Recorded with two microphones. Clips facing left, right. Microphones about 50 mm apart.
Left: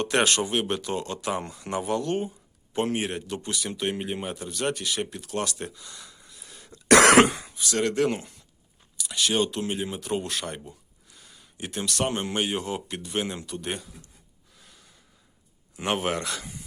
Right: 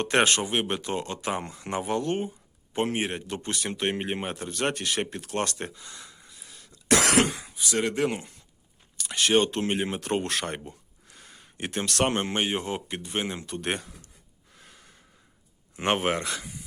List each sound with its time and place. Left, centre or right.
0.0 s speech: right
6.3 s throat clearing: centre
6.8 s cough: left
7.3 s a sound: centre
7.6 s speech: centre
9.0 s speech: right
10.7 s a sound: right
12.3 s speech: right
14.5 s gasp: right
15.7 s speech: right
16.4 s a sound: centre